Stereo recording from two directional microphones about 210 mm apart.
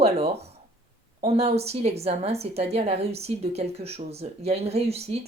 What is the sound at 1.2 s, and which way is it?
A woman's voice, 30° right (ahead or behind).